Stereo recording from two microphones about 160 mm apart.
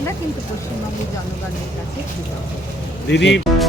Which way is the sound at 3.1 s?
90° left.